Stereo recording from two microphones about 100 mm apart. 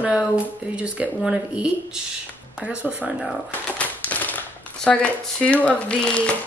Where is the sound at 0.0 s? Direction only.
10° right (ahead or behind).